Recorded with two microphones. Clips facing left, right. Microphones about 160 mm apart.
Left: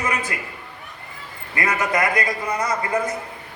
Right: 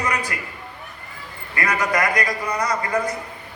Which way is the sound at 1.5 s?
25° left (ahead or behind).